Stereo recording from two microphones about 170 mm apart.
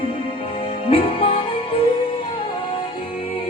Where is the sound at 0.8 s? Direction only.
35° left (ahead or behind).